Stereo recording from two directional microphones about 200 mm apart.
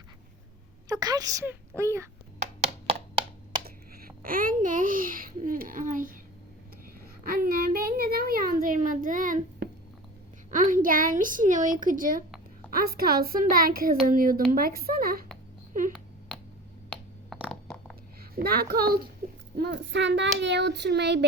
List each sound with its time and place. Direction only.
0.9 s a woman's voice: 20° right (ahead or behind)
2.9 s a sound: 25° right (ahead or behind)
3.9 s a child's voice: 45° right (ahead or behind)
7.3 s a child's voice: 45° right (ahead or behind)
17.4 s a sound: centre (ahead or behind)
18.2 s a child's voice: 50° right (ahead or behind)